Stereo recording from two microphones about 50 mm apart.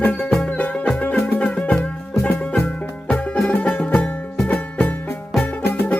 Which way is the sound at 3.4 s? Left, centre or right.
Left.